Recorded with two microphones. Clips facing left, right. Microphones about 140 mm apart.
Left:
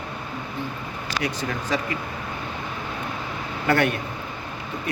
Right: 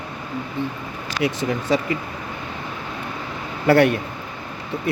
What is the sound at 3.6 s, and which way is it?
Speech, 35° right (ahead or behind).